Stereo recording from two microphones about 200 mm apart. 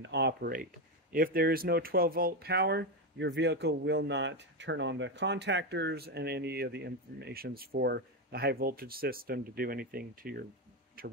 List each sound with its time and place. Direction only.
0.0 s speech: 60° right (ahead or behind)